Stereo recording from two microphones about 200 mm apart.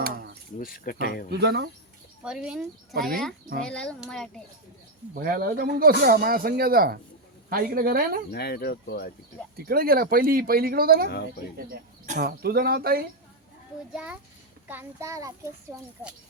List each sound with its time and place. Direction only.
0.0 s a sound: 55° right (ahead or behind)
0.6 s speech: 45° left (ahead or behind)
1.3 s speech: 60° right (ahead or behind)
2.2 s speech: 5° right (ahead or behind)
5.2 s speech: 50° right (ahead or behind)
8.3 s speech: 55° left (ahead or behind)
9.6 s speech: 50° right (ahead or behind)
13.9 s a child's voice: 5° right (ahead or behind)